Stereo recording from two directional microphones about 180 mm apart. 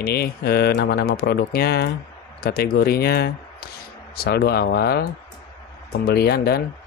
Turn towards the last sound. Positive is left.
turn(degrees=60)  # may be behind; listen again after turning